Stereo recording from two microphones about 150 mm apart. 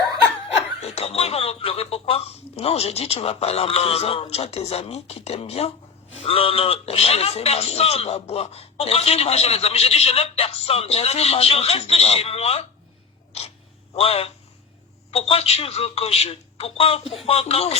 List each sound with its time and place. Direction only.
0.8 s speech: 45° left (ahead or behind)